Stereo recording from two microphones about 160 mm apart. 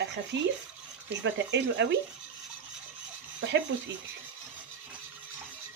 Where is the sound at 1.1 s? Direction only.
90° right.